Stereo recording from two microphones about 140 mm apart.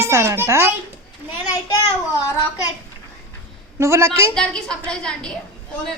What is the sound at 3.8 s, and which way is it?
Speech, 20° right (ahead or behind).